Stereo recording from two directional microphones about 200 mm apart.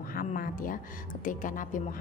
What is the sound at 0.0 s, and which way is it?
A woman's voice, 45° left (ahead or behind).